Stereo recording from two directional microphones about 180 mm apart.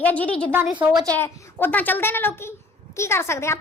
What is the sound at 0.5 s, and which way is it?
Speech, 10° right (ahead or behind).